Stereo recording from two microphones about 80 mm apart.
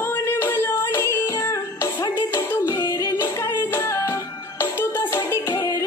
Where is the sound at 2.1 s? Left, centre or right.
Left.